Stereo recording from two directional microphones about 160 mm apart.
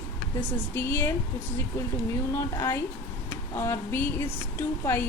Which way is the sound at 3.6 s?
15° left (ahead or behind).